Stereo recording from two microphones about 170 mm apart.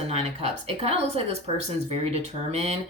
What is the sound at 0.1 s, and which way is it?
Speech, 35° right (ahead or behind).